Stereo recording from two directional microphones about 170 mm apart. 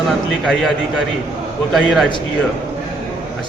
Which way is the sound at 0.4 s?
Centre (ahead or behind).